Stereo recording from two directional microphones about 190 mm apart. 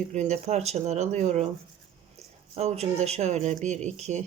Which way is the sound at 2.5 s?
35° right (ahead or behind).